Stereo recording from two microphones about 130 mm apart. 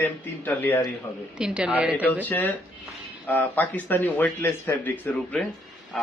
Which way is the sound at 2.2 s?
15° left (ahead or behind).